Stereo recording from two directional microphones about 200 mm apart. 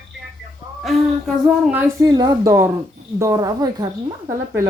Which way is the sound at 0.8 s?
5° right (ahead or behind).